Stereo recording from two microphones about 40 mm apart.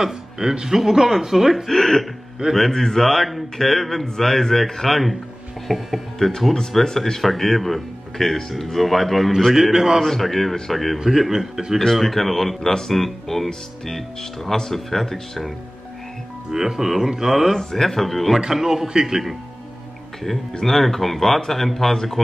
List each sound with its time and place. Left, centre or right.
0.0 s speech: centre
1.7 s speech: centre
9.7 s speech: centre
10.0 s speech: centre
11.0 s speech: centre
11.8 s speech: centre
16.4 s speech: centre
17.6 s speech: centre
18.5 s speech: centre
20.6 s speech: centre